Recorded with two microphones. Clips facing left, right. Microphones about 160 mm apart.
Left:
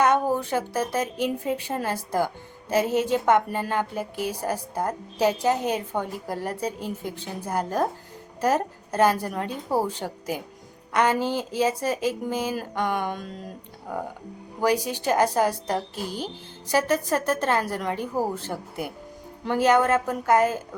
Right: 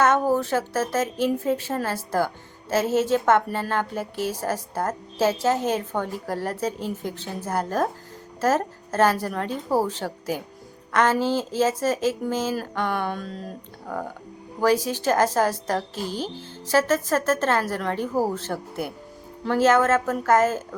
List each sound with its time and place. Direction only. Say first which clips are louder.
0.0 s a woman's voice: right 1 dB; 15° left (ahead or behind)
14.6 s a woman's voice: right 2 dB; 15° left (ahead or behind)